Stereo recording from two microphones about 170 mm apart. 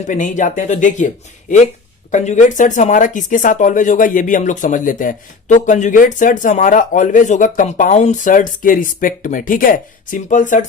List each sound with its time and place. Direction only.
0.1 s speech: 50° left (ahead or behind)